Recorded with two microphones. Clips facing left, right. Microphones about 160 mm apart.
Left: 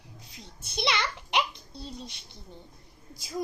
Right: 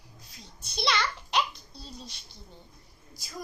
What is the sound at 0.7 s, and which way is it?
A child's voice, 20° left (ahead or behind).